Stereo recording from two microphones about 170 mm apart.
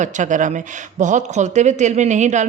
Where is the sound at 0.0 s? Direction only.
45° right (ahead or behind).